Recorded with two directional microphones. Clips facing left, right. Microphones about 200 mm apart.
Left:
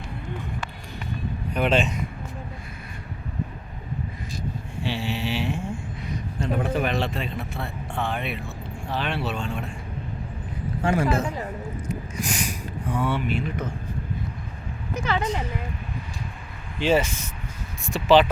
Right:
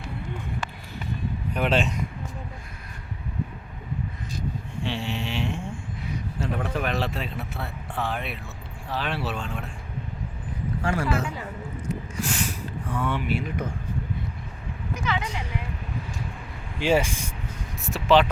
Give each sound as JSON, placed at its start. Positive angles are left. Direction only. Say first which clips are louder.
{"t": 1.5, "sound": "speech", "louder": "left 2 dB", "side_deg": 0}
{"t": 4.8, "sound": "a sound", "louder": "left 2 dB", "side_deg": 5}
{"t": 6.1, "sound": "speech", "louder": "left 2 dB", "side_deg": 0}
{"t": 10.8, "sound": "speech", "louder": "left 4 dB", "side_deg": 20}
{"t": 12.1, "sound": "a sound", "louder": "even", "side_deg": 15}
{"t": 13.2, "sound": "a man's voice", "louder": "left 1 dB", "side_deg": -10}
{"t": 15.0, "sound": "a woman's voice", "louder": "left 3 dB", "side_deg": 45}
{"t": 16.8, "sound": "a man's voice", "louder": "left 1 dB", "side_deg": -10}
{"t": 17.8, "sound": "speech", "louder": "left 2 dB", "side_deg": 0}